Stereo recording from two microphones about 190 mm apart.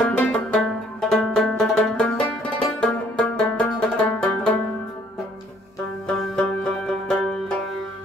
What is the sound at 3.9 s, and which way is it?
Banjo, 5° left (ahead or behind).